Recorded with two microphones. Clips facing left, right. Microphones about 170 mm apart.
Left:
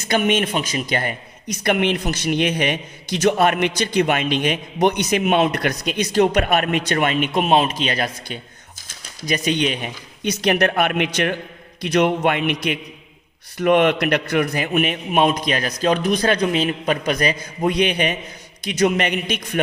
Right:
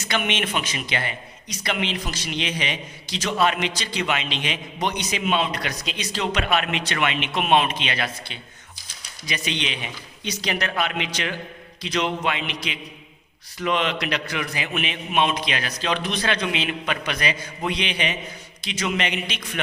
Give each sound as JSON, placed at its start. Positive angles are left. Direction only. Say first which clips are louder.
{"t": 0.1, "sound": "a man's voice", "louder": "left 6 dB", "side_deg": 45}